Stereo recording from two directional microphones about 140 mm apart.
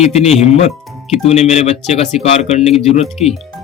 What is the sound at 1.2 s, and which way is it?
Speech, 50° left (ahead or behind).